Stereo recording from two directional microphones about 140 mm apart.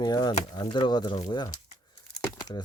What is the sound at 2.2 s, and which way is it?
Crumpling, 25° left (ahead or behind).